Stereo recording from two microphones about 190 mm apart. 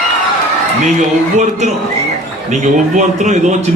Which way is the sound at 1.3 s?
40° right (ahead or behind).